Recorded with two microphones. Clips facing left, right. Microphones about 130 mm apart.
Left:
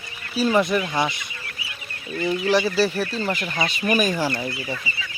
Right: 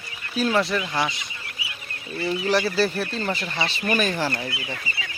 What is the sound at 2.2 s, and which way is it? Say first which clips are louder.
Speech: left 2 dB; 5° left (ahead or behind).